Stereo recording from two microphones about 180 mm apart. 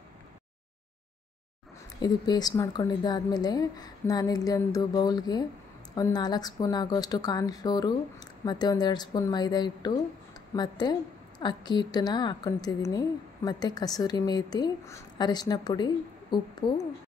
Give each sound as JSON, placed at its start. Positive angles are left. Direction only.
{"t": 2.0, "sound": "a woman's voice", "side_deg": 25}